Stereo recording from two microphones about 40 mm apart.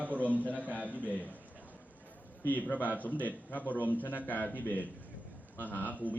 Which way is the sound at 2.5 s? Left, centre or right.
Left.